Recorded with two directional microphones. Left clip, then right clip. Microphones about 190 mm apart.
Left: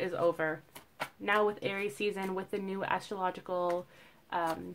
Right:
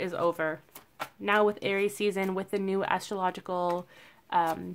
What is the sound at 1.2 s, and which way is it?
Speech, 40° right (ahead or behind).